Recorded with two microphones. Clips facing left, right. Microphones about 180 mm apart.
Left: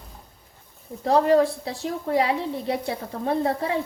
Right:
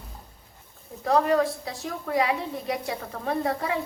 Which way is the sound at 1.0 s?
30° left (ahead or behind).